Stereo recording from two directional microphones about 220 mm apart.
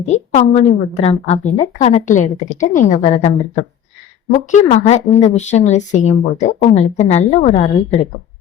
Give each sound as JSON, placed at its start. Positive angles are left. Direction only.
{"t": 0.1, "sound": "a woman's voice", "side_deg": 30}